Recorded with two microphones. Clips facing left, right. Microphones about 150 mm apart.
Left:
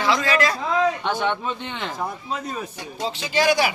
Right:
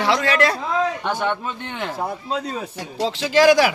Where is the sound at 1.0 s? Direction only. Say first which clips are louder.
Right 1 dB; 10° right (ahead or behind).